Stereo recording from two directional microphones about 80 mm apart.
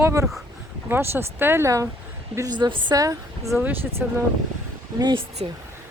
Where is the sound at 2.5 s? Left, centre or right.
Right.